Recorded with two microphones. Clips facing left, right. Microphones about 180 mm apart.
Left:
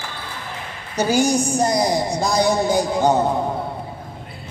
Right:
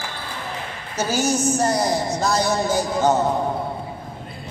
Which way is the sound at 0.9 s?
15° left (ahead or behind).